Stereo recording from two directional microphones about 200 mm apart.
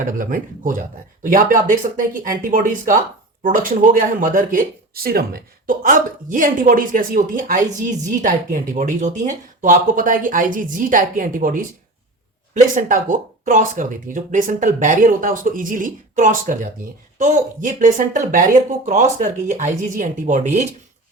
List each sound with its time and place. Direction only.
0.0 s a woman's voice: 40° right (ahead or behind)
12.7 s a woman's voice: 40° right (ahead or behind)